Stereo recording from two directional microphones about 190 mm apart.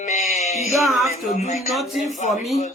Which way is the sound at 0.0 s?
40° left (ahead or behind).